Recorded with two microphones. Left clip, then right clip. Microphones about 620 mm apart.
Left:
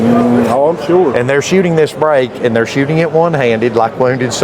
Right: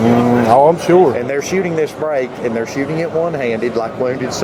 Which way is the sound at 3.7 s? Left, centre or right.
Left.